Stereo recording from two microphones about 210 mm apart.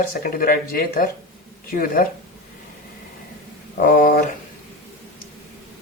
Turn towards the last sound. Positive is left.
turn(degrees=45)  # may be behind; listen again after turning